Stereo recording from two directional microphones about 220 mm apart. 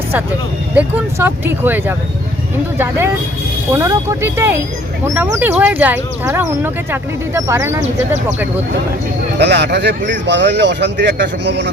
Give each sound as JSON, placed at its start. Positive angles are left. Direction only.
{"t": 0.8, "sound": "speech", "side_deg": -10}
{"t": 9.4, "sound": "speech", "side_deg": -50}